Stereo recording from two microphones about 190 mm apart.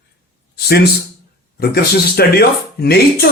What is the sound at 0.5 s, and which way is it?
Speech, 55° left (ahead or behind).